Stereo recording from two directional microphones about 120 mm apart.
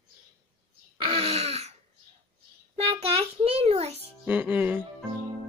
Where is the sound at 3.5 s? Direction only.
60° right (ahead or behind).